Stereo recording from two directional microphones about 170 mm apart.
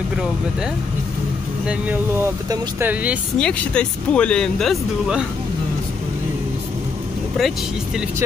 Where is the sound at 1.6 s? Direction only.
5° right (ahead or behind).